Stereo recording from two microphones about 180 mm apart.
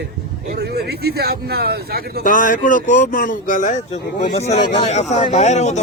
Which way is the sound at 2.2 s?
50° left (ahead or behind).